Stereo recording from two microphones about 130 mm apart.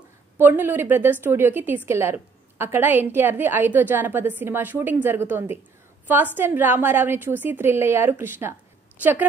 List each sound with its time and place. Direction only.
0.4 s a woman's voice: 15° right (ahead or behind)